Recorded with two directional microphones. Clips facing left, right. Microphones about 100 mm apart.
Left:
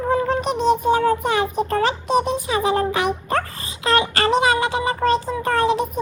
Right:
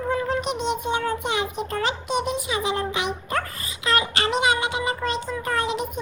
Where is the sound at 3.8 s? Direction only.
35° left (ahead or behind).